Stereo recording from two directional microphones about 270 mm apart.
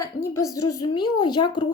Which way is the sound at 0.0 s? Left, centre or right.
Centre.